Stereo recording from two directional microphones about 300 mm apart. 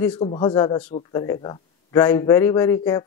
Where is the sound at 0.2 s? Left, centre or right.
Centre.